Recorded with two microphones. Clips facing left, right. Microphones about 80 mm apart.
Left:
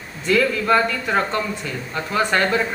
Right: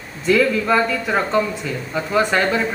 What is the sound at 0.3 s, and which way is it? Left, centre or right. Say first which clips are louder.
Speech: right 2 dB; centre.